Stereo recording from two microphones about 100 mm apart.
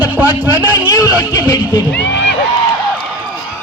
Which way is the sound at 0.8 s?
35° left (ahead or behind).